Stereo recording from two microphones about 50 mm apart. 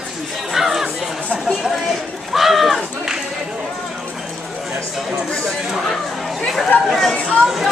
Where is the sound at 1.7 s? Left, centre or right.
Centre.